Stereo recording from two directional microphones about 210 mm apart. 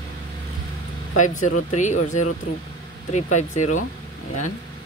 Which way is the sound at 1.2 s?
35° left (ahead or behind).